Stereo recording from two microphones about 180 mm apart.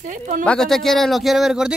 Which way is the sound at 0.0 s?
45° right (ahead or behind).